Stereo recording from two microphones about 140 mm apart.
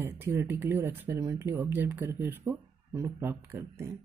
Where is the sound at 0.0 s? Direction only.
15° right (ahead or behind).